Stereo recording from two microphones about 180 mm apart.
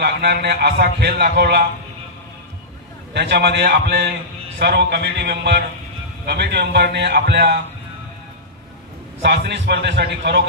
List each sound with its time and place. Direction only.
0.0 s a man's voice: 65° right (ahead or behind)
3.1 s a man's voice: 70° right (ahead or behind)
9.2 s a man's voice: 70° right (ahead or behind)